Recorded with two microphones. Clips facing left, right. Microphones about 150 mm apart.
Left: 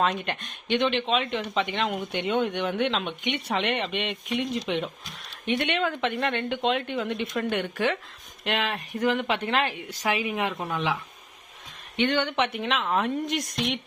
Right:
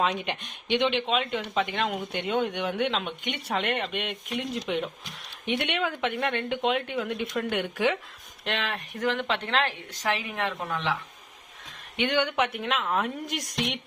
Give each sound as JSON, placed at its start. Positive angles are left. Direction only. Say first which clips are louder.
{"t": 0.0, "sound": "speech", "louder": "left 1 dB", "side_deg": -10}
{"t": 8.4, "sound": "a woman's voice", "louder": "left 3 dB", "side_deg": 5}
{"t": 11.9, "sound": "speech", "louder": "left 1 dB", "side_deg": -10}